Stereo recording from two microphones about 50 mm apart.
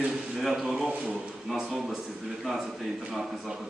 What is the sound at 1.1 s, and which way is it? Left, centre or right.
A man's voice, centre.